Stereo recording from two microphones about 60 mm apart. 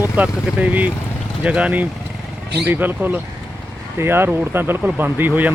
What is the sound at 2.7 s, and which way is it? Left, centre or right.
Speech, right.